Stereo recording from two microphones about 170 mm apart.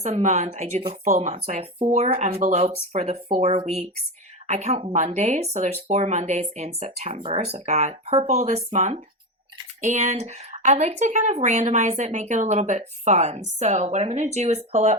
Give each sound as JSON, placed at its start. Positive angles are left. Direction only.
{"t": 0.0, "sound": "speech", "side_deg": -45}